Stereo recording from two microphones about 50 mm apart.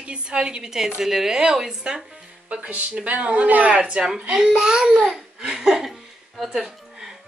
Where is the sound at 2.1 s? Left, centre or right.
Right.